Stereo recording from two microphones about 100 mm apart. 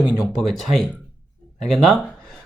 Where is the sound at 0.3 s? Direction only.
5° left (ahead or behind).